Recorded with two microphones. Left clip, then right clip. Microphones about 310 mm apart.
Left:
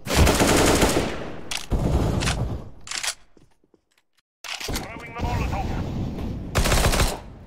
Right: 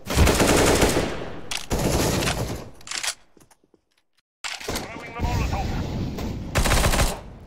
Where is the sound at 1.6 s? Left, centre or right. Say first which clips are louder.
Right 5 dB; right.